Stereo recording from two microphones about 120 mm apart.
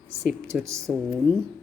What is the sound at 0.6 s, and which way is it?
Speech, 25° right (ahead or behind).